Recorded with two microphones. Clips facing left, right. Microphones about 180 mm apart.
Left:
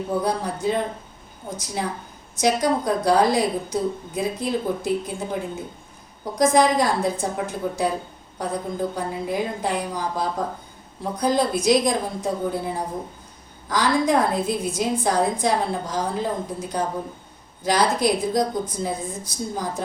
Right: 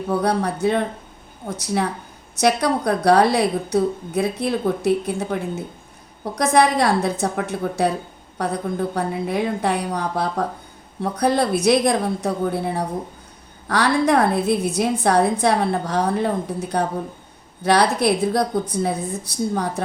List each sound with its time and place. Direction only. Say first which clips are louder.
0.1 s a woman's voice: right 5 dB; 70° right (ahead or behind)